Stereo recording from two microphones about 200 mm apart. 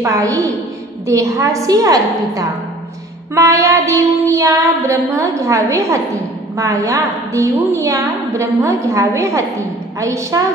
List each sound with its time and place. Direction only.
0.0 s a woman's voice: 15° right (ahead or behind)